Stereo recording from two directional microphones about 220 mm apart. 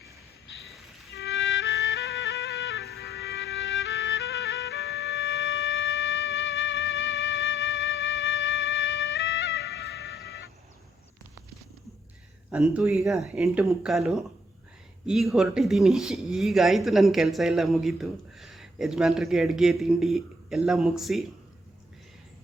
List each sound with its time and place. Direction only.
1.1 s music: 55° left (ahead or behind)
12.5 s speech: 5° right (ahead or behind)